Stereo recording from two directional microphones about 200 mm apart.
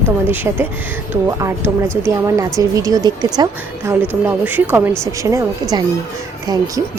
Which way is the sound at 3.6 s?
10° right (ahead or behind).